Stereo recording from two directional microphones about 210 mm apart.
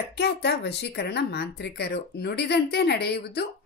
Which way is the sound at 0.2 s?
50° left (ahead or behind).